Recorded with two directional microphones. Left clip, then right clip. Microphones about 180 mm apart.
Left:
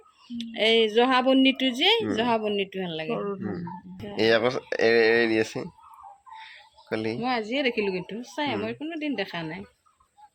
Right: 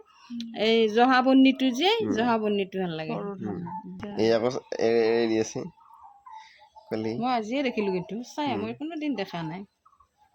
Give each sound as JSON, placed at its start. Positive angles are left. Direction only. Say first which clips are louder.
{"t": 0.3, "sound": "speech", "louder": "left 2 dB", "side_deg": -55}
{"t": 3.2, "sound": "speech", "louder": "left 4 dB", "side_deg": 30}
{"t": 4.2, "sound": "speech", "louder": "left 2 dB", "side_deg": -15}
{"t": 6.9, "sound": "speech", "louder": "left 2 dB", "side_deg": -10}
{"t": 7.2, "sound": "speech", "louder": "right 1 dB", "side_deg": -65}